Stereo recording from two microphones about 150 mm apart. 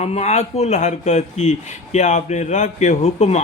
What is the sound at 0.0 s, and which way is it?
Speech, 45° left (ahead or behind).